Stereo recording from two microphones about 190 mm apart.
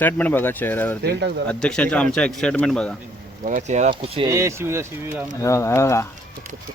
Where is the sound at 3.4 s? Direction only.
40° right (ahead or behind).